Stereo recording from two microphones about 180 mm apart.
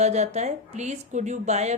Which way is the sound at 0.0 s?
40° right (ahead or behind).